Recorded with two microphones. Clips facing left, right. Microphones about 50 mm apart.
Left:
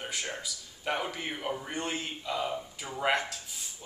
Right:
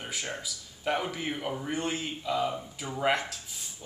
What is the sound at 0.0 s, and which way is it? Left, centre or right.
A man's voice, centre.